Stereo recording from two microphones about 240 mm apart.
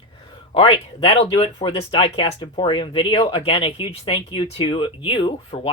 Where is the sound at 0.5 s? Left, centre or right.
Left.